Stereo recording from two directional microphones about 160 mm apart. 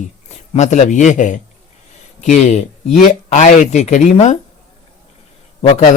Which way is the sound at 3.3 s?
45° left (ahead or behind).